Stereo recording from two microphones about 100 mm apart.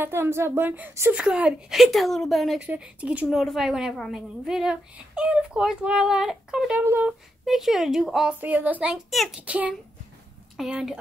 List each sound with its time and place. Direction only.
0.0 s a woman's voice: 25° right (ahead or behind)
1.1 s a woman's voice: 10° right (ahead or behind)
2.6 s speech: 10° right (ahead or behind)
3.3 s a woman's voice: centre (ahead or behind)
6.8 s a woman's voice: 20° right (ahead or behind)
7.1 s a woman's voice: 5° right (ahead or behind)
8.4 s a woman's voice: 20° right (ahead or behind)